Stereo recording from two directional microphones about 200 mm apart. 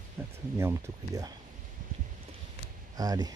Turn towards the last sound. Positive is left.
turn(degrees=-20)  # may be behind; listen again after turning